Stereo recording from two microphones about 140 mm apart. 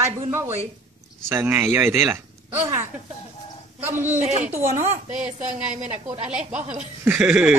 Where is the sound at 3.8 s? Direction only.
15° right (ahead or behind).